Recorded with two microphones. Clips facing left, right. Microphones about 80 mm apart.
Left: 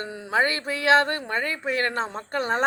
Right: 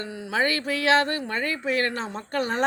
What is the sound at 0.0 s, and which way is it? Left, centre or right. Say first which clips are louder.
Speech: left 2 dB; left.